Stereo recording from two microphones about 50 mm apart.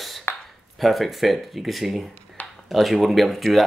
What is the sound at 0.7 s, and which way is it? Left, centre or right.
Speech, centre.